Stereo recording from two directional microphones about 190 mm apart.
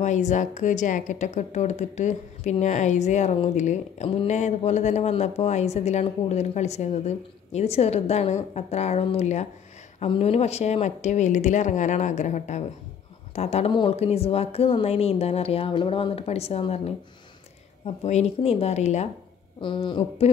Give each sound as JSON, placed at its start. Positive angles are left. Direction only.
{"t": 0.0, "sound": "a woman's voice", "side_deg": 40}
{"t": 19.6, "sound": "speech", "side_deg": 25}